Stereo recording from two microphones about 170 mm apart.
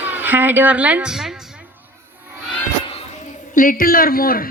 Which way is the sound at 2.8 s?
35° left (ahead or behind).